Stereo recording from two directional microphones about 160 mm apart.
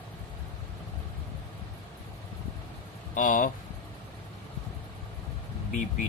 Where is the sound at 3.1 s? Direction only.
55° left (ahead or behind).